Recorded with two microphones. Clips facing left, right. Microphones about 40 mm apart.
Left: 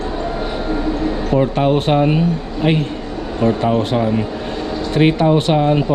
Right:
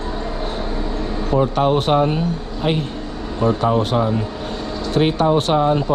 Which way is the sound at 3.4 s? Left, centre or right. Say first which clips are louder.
Left 1 dB; left.